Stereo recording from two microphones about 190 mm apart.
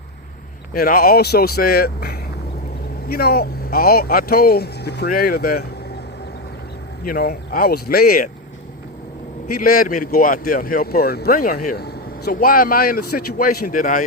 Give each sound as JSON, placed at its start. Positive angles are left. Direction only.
{"t": 0.7, "sound": "speech", "side_deg": 50}
{"t": 7.0, "sound": "speech", "side_deg": 50}
{"t": 9.6, "sound": "speech", "side_deg": 50}